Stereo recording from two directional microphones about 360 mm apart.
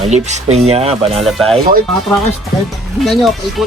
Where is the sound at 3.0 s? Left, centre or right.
Centre.